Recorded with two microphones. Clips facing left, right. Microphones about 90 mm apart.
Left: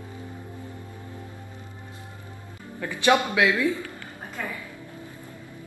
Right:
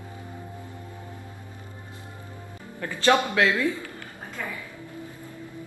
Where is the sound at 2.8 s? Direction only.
15° left (ahead or behind).